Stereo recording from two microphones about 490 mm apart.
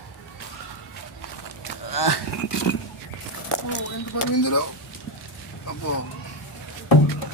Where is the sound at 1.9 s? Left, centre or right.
Left.